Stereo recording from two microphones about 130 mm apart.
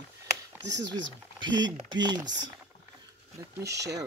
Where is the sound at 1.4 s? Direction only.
35° right (ahead or behind).